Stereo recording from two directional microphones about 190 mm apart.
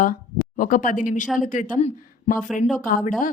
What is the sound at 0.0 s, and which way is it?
A woman's voice, 45° left (ahead or behind).